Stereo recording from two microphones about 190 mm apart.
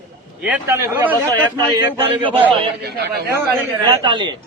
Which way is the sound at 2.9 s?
55° right (ahead or behind).